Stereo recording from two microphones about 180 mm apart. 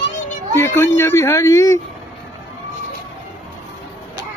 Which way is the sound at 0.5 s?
15° left (ahead or behind).